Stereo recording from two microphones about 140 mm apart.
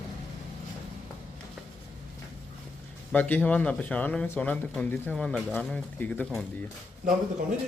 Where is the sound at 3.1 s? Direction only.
10° left (ahead or behind).